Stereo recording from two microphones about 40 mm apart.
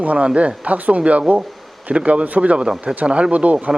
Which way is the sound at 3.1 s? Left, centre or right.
Right.